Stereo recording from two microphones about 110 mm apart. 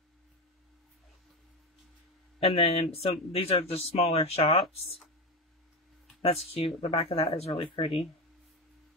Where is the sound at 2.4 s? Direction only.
60° left (ahead or behind).